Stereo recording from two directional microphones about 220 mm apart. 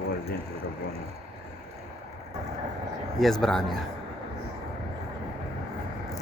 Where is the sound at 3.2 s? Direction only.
Centre (ahead or behind).